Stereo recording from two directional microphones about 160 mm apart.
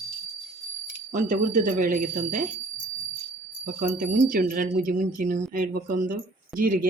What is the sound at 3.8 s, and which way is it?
Speech, 55° right (ahead or behind).